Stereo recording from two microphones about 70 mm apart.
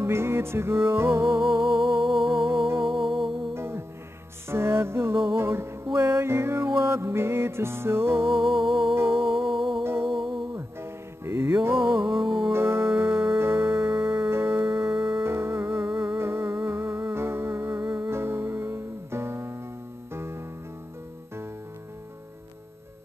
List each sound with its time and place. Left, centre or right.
0.0 s music: right
2.9 s music: centre
3.5 s music: right